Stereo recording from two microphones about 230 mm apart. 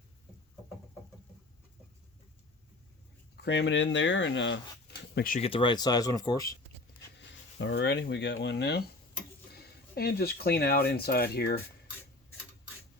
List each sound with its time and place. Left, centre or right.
3.4 s speech: left
5.1 s speech: left
5.4 s speech: left
7.2 s speech: left